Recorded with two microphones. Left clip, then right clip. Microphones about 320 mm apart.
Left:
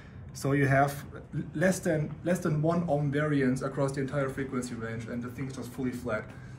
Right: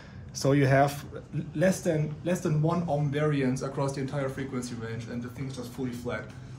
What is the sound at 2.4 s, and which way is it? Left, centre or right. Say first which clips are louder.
Speech: even; centre.